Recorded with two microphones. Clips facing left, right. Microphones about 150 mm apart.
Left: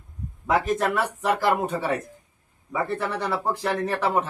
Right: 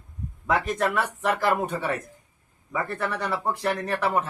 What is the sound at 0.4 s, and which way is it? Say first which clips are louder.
Speech: left 3 dB; 30° left (ahead or behind).